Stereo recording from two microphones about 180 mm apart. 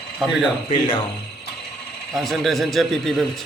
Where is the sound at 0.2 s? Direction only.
Centre (ahead or behind).